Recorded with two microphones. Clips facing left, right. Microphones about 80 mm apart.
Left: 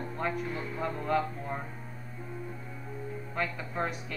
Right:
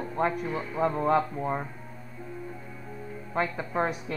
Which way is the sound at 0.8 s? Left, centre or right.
Right.